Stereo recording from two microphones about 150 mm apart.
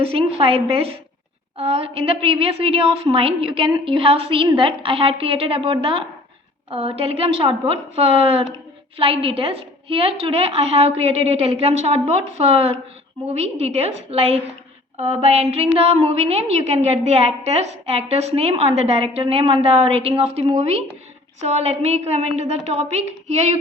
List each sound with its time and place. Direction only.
0.0 s a woman's voice: 40° right (ahead or behind)